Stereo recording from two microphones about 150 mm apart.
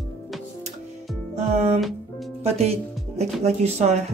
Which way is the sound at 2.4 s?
45° right (ahead or behind).